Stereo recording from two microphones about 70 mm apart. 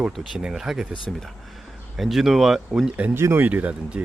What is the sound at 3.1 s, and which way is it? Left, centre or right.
Speech, right.